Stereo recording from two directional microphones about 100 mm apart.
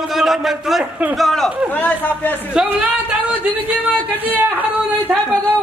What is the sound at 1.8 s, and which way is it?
Speech, 20° left (ahead or behind).